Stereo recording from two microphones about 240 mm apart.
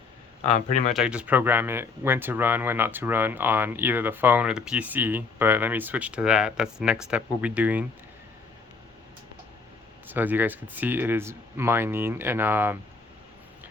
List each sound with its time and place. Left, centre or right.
0.4 s speech: left
0.9 s speech: centre
10.1 s speech: centre